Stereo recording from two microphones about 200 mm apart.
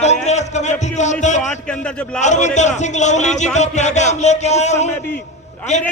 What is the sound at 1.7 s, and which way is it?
Speech, 5° left (ahead or behind).